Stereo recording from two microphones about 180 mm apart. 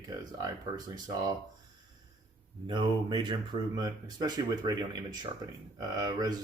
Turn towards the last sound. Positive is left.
turn(degrees=-20)  # may be behind; listen again after turning